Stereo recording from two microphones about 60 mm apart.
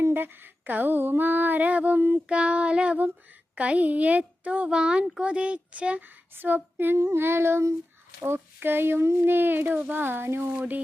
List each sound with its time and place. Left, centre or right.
0.1 s female singing: right
2.1 s child singing: centre
3.5 s speech: right
6.0 s female singing: right
6.9 s child singing: right
8.2 s female singing: right
10.5 s speech: right